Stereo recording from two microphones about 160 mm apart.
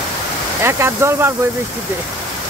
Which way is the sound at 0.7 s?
15° right (ahead or behind).